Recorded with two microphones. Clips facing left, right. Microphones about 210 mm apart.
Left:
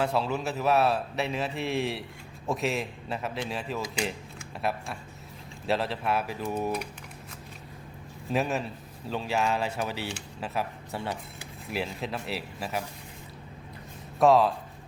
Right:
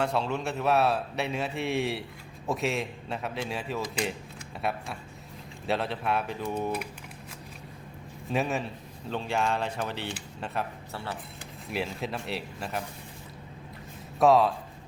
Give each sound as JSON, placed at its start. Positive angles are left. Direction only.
{"t": 0.0, "sound": "a man's voice", "side_deg": 0}
{"t": 8.3, "sound": "a man's voice", "side_deg": 0}
{"t": 10.9, "sound": "speech", "side_deg": 15}
{"t": 11.7, "sound": "a man's voice", "side_deg": 0}
{"t": 14.2, "sound": "a man's voice", "side_deg": 0}